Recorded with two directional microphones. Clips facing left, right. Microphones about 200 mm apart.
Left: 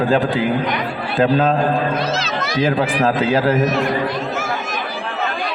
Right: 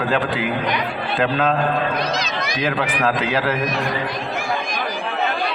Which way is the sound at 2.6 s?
30° left (ahead or behind).